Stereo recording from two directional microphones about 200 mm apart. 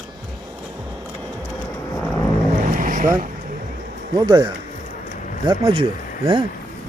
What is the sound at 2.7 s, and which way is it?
Vehicle, 40° right (ahead or behind).